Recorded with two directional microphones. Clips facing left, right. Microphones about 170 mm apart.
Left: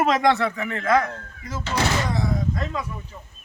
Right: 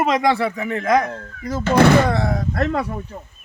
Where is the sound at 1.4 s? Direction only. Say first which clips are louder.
Right 11 dB; 45° right (ahead or behind); by 3.0 s 65° right (ahead or behind).